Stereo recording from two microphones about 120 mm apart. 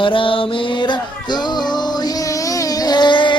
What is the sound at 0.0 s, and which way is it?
Music, 45° left (ahead or behind).